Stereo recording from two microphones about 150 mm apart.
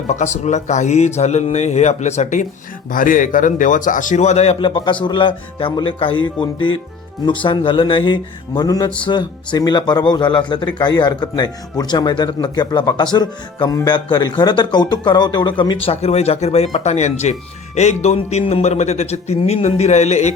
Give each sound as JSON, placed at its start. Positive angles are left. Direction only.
{"t": 0.1, "sound": "speech", "side_deg": 50}
{"t": 2.9, "sound": "a man's voice", "side_deg": 65}